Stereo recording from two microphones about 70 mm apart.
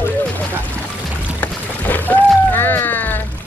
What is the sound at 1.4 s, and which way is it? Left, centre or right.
Music, left.